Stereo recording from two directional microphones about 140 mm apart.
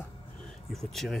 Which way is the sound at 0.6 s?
Centre (ahead or behind).